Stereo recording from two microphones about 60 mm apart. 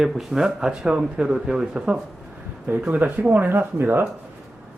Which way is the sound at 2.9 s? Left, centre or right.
Right.